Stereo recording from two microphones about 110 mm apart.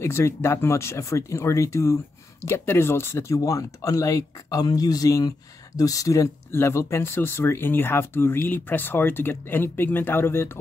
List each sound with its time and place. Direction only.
0.0 s speech: 25° left (ahead or behind)